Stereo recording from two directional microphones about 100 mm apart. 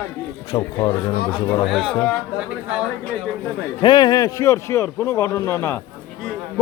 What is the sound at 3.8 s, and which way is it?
A man's voice, 45° left (ahead or behind).